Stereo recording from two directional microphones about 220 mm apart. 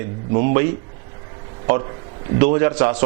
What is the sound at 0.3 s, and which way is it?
A man's voice, 15° right (ahead or behind).